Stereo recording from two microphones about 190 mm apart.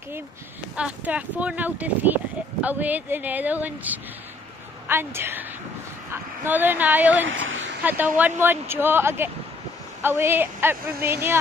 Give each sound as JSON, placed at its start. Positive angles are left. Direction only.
{"t": 0.7, "sound": "speech", "side_deg": -5}
{"t": 6.4, "sound": "speech", "side_deg": -10}
{"t": 7.2, "sound": "a man's voice", "side_deg": -90}
{"t": 7.8, "sound": "speech", "side_deg": -10}